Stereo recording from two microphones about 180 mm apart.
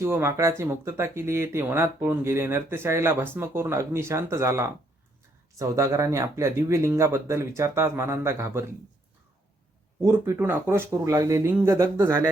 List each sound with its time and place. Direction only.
0.0 s speech: 15° right (ahead or behind)
10.1 s speech: 15° right (ahead or behind)